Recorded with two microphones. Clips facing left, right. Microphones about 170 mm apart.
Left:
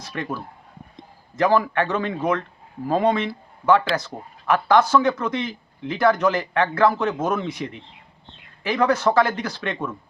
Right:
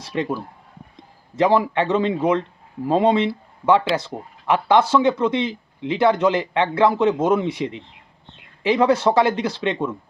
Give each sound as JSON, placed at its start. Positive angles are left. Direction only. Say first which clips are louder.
{"t": 0.1, "sound": "speech", "louder": "right 6 dB", "side_deg": -20}